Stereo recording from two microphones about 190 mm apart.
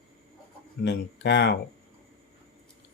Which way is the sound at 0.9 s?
65° left (ahead or behind).